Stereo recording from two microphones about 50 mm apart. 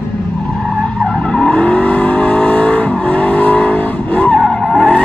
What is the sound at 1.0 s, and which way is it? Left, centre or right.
Vehicle, centre.